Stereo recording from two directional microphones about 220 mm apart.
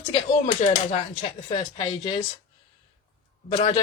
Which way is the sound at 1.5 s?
25° left (ahead or behind).